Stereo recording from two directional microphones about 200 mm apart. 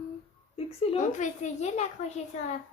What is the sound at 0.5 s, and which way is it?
A child's voice, 35° left (ahead or behind).